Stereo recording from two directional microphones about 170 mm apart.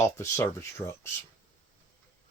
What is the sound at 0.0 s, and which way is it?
Speech, 15° left (ahead or behind).